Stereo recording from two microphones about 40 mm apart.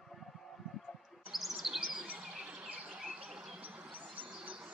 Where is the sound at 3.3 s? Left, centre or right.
Centre.